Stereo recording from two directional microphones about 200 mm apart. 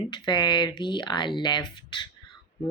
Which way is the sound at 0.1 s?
20° left (ahead or behind).